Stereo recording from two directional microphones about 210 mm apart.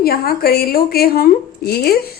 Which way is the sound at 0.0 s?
45° left (ahead or behind).